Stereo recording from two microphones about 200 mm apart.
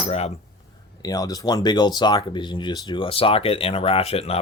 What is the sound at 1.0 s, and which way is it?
Speech, 20° left (ahead or behind).